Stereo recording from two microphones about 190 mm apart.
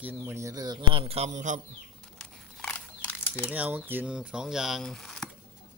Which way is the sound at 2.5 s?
5° left (ahead or behind).